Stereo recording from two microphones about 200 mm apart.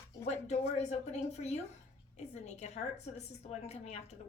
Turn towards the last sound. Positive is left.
turn(degrees=35)  # may be behind; listen again after turning